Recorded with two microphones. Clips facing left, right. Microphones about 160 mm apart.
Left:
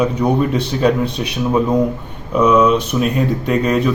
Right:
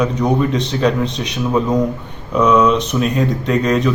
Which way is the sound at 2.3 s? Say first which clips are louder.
Left 1 dB; 10° left (ahead or behind).